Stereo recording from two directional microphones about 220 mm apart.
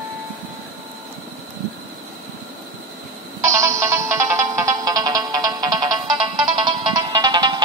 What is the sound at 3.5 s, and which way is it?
Music, 15° right (ahead or behind).